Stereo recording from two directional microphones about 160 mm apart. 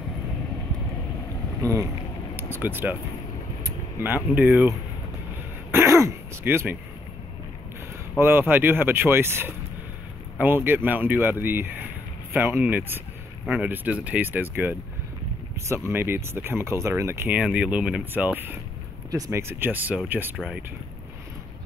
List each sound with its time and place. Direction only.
2.3 s speech: 15° right (ahead or behind)
5.7 s speech: 15° right (ahead or behind)
8.2 s speech: 15° right (ahead or behind)